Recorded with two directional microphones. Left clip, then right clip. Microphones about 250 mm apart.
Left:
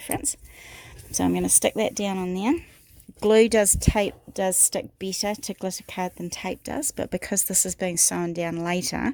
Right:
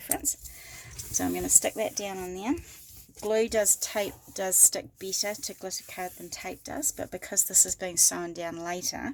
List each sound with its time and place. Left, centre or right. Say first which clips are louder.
1.1 s a woman's voice: left 3 dB; left